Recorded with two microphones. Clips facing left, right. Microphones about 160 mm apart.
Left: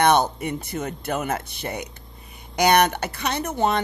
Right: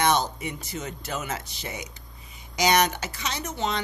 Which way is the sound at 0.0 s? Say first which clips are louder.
Left 5 dB; 55° left (ahead or behind).